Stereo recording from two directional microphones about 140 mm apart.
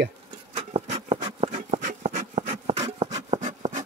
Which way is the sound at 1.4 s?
60° right (ahead or behind).